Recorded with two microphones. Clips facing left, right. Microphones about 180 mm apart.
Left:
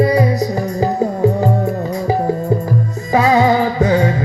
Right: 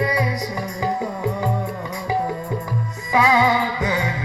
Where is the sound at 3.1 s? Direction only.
45° left (ahead or behind).